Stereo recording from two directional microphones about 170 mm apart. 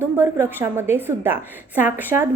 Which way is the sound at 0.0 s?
15° right (ahead or behind).